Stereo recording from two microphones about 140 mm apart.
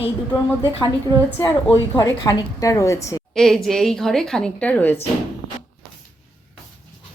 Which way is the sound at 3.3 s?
Centre (ahead or behind).